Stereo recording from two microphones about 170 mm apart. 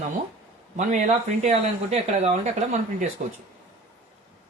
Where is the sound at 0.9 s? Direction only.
45° right (ahead or behind).